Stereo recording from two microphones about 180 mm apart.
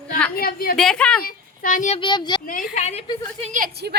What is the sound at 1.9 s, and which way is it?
Speech, 25° left (ahead or behind).